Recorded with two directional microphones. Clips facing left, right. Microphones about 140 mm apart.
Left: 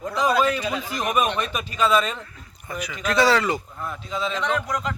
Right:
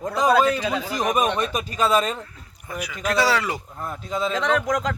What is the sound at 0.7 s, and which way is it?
Speech, 35° right (ahead or behind).